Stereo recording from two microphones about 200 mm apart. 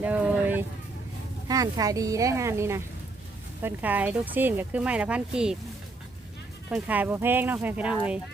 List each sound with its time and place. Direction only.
0.0 s vehicle: 5° right (ahead or behind)
1.5 s speech: 20° right (ahead or behind)
6.7 s speech: 5° right (ahead or behind)